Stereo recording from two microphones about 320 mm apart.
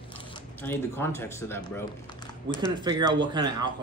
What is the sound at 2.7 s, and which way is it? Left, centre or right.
A man's voice, centre.